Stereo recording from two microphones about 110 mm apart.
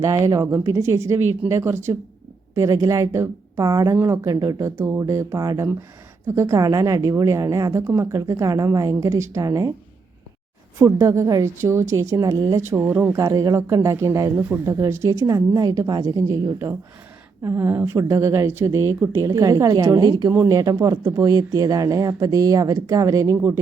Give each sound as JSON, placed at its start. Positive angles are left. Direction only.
{"t": 0.0, "sound": "speech", "side_deg": -35}
{"t": 10.8, "sound": "speech", "side_deg": -30}
{"t": 12.7, "sound": "speech", "side_deg": -15}
{"t": 13.1, "sound": "speech", "side_deg": -30}